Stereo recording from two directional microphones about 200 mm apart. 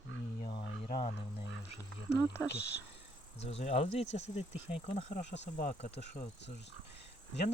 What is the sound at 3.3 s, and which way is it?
Speech, 30° left (ahead or behind).